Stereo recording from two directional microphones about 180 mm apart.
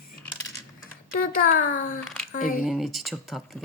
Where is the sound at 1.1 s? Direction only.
50° left (ahead or behind).